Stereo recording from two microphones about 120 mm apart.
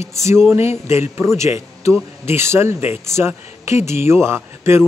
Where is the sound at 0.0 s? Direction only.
25° right (ahead or behind).